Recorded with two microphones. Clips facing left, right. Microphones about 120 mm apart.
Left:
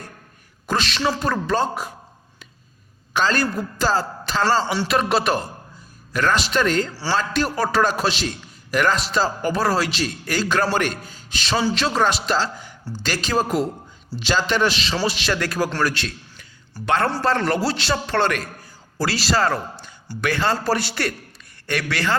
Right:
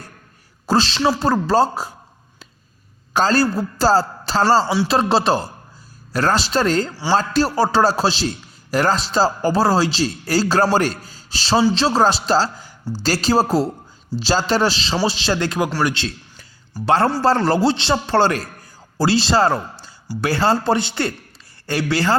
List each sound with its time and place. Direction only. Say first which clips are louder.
0.7 s a man's voice: right 5 dB; 30° right (ahead or behind)
3.1 s a man's voice: right 4 dB; 40° right (ahead or behind)
4.6 s a man's voice: right 4 dB; 10° right (ahead or behind)
4.9 s a man's voice: right 3 dB; 30° right (ahead or behind)
6.9 s a man's voice: right 5 dB; 15° right (ahead or behind)
7.2 s a man's voice: right 4 dB; 30° right (ahead or behind)